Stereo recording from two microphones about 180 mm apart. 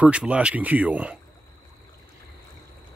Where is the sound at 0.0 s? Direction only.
5° right (ahead or behind).